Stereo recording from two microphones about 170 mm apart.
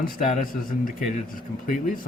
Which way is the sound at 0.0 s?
50° left (ahead or behind).